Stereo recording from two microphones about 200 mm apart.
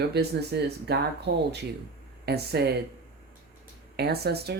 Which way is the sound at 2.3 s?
55° right (ahead or behind).